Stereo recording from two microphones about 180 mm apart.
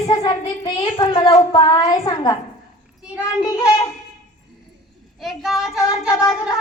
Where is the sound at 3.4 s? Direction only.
20° left (ahead or behind).